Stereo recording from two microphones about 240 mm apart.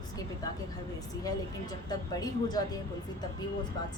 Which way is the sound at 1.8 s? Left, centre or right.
Centre.